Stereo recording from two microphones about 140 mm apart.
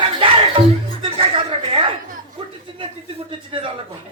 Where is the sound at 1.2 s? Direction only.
40° right (ahead or behind).